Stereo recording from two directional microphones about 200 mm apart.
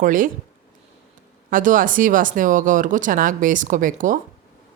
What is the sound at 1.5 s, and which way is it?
A woman's voice, 40° right (ahead or behind).